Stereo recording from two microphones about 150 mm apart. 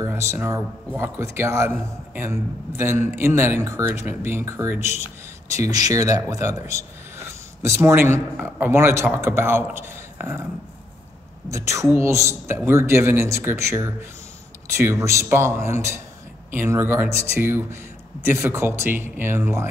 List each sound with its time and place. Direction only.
0.0 s speech: 20° right (ahead or behind)
11.5 s speech: 20° right (ahead or behind)